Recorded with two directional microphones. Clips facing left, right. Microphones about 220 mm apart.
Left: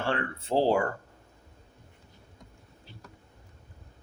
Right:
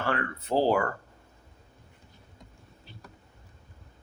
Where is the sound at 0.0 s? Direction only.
25° left (ahead or behind).